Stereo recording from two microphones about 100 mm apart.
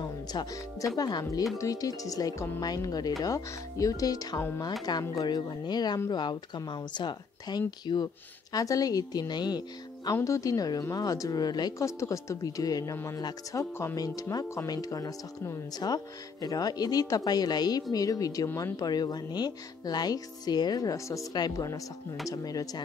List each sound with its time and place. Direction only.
0.0 s music: 45° left (ahead or behind)
0.9 s speech: 40° left (ahead or behind)
10.1 s speech: 30° left (ahead or behind)
11.8 s speech: 30° left (ahead or behind)